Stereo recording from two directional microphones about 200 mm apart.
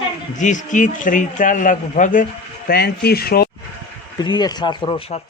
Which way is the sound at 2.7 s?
50° left (ahead or behind).